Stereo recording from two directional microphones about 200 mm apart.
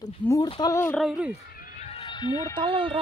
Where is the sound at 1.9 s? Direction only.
25° left (ahead or behind).